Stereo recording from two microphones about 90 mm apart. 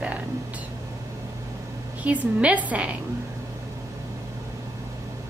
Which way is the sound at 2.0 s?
15° right (ahead or behind).